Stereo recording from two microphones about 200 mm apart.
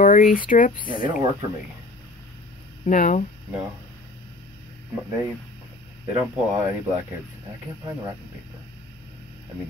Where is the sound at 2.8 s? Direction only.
40° left (ahead or behind).